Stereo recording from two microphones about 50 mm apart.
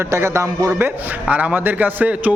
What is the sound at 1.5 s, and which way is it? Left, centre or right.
Speech, right.